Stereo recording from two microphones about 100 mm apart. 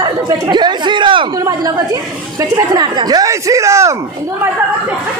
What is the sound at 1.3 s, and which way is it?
Speech, 40° right (ahead or behind).